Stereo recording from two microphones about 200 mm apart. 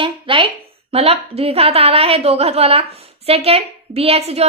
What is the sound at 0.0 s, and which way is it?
A woman's voice, 25° right (ahead or behind).